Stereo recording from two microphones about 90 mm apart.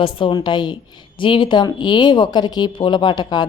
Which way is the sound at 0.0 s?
75° left (ahead or behind).